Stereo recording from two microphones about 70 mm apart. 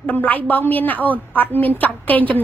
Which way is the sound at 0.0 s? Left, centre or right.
Left.